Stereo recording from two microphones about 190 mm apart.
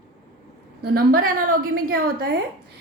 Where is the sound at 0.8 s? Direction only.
55° right (ahead or behind).